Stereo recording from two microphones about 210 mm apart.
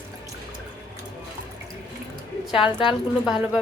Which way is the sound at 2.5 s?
25° left (ahead or behind).